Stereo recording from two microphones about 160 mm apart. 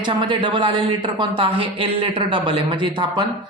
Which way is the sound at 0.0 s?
30° right (ahead or behind).